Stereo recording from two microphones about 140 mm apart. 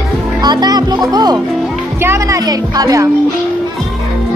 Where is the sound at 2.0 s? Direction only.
15° right (ahead or behind).